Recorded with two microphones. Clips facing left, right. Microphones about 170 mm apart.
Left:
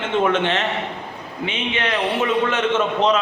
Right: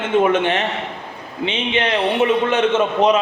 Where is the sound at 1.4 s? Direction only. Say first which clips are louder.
Right 4 dB; 30° right (ahead or behind).